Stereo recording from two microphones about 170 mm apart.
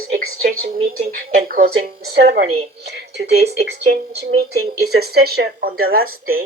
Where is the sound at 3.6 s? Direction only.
70° right (ahead or behind).